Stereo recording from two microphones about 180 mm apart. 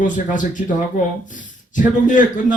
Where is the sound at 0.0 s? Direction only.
45° left (ahead or behind).